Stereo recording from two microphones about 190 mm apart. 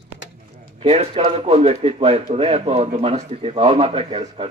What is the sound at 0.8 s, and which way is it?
Speech, 35° right (ahead or behind).